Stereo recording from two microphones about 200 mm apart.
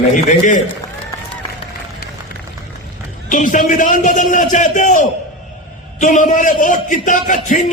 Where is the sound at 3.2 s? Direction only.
40° left (ahead or behind).